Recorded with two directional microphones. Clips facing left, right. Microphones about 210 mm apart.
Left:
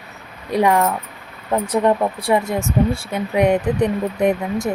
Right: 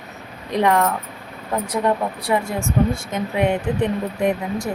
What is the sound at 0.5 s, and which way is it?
Speech, 10° left (ahead or behind).